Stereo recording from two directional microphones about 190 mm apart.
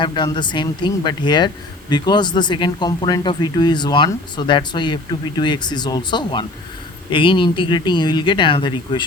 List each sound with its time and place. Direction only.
0.0 s speech: 25° left (ahead or behind)